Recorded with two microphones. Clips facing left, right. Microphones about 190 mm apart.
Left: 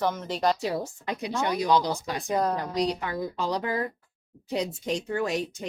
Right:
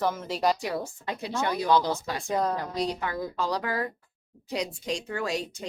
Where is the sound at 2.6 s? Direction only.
20° left (ahead or behind).